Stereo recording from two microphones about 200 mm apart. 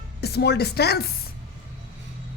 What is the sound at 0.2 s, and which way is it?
Speech, 55° left (ahead or behind).